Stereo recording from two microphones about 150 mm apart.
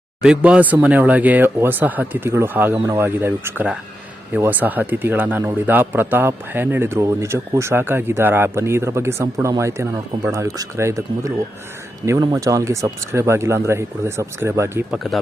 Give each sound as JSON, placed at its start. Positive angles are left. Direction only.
{"t": 0.2, "sound": "speech", "side_deg": -5}
{"t": 12.0, "sound": "speech", "side_deg": -20}
{"t": 14.8, "sound": "speech", "side_deg": 0}